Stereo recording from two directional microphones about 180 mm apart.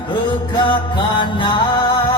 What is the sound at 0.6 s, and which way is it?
Music, 25° left (ahead or behind).